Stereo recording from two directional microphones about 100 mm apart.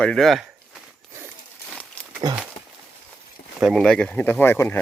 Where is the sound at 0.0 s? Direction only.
5° left (ahead or behind).